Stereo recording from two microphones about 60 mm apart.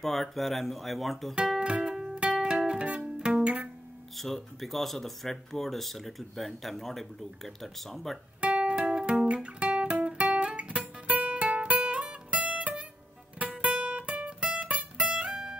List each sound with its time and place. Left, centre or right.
0.0 s speech: centre
1.3 s music: centre
4.2 s speech: centre
8.4 s music: centre
9.2 s guitar: centre
13.4 s music: right